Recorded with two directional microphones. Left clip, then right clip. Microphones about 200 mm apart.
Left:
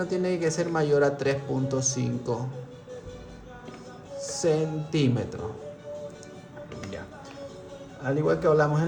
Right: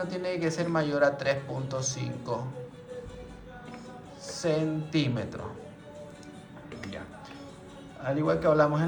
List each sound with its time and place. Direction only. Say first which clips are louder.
0.0 s a man's voice: left 4 dB; 60° left (ahead or behind)
4.2 s speech: left 4 dB; 60° left (ahead or behind)
8.0 s a man's voice: left 2 dB; 65° left (ahead or behind)